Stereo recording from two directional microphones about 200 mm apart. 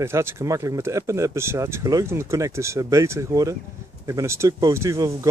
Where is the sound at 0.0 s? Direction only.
15° right (ahead or behind).